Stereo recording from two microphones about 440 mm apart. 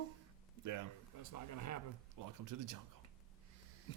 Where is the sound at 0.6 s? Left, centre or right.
Right.